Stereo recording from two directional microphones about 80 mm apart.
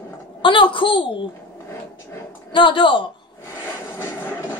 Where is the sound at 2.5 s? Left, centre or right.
Left.